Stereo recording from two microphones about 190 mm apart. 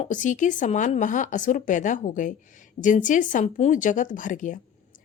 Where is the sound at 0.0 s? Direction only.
40° left (ahead or behind).